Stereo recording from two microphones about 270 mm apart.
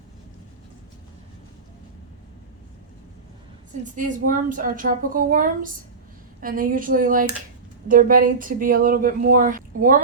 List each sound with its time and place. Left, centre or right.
3.9 s a woman's voice: right